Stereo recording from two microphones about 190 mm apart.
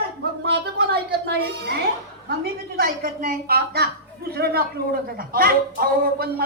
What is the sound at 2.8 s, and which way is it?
A woman's voice, 45° right (ahead or behind).